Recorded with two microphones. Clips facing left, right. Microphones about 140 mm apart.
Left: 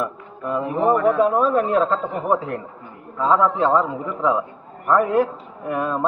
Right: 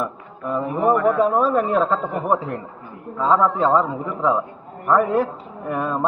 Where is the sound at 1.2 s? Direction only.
Centre (ahead or behind).